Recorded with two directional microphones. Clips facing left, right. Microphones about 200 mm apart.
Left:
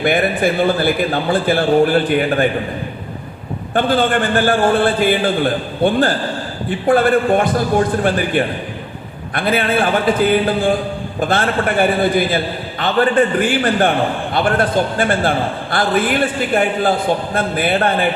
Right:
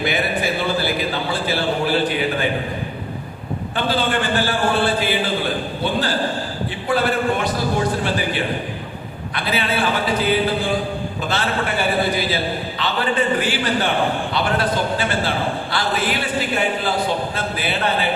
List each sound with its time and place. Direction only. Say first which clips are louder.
0.0 s a man's voice: left 6 dB; 55° left (ahead or behind)
3.8 s a man's voice: left 6 dB; 50° left (ahead or behind)
9.3 s a man's voice: left 6 dB; 50° left (ahead or behind)